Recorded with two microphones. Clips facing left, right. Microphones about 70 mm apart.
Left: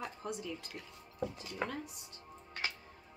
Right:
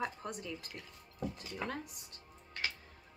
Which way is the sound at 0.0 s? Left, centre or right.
Right.